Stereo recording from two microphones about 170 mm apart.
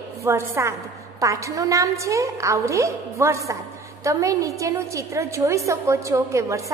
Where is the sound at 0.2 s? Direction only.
15° right (ahead or behind).